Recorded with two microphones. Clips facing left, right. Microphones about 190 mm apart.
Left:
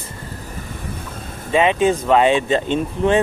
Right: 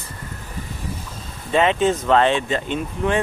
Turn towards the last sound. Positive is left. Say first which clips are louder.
# left 5 dB
turn(degrees=25)  # may be behind; listen again after turning